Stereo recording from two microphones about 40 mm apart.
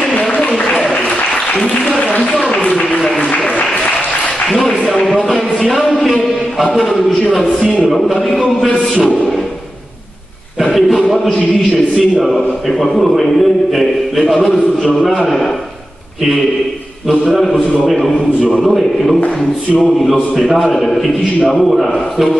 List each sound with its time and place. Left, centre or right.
0.7 s applause: centre
2.5 s a sound: left
4.5 s a sound: centre
7.6 s a man's voice: centre
10.6 s a man's voice: centre
17.3 s a man's voice: centre